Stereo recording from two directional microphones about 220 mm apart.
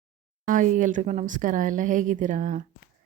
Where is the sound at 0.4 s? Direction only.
35° right (ahead or behind).